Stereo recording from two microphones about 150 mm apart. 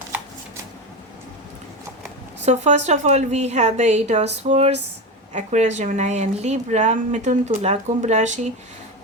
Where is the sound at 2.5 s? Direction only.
50° right (ahead or behind).